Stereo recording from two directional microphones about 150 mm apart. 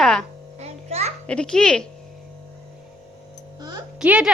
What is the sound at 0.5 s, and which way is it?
Music, 45° right (ahead or behind).